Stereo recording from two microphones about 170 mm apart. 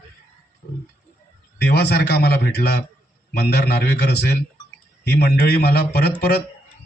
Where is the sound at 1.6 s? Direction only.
75° left (ahead or behind).